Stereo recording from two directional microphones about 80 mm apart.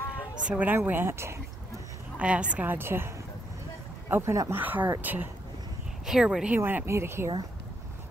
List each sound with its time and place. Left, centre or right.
0.5 s speech: centre; by 1.4 s right
2.1 s a woman's voice: centre
4.1 s a woman's voice: right
6.0 s speech: centre
6.5 s a woman's voice: right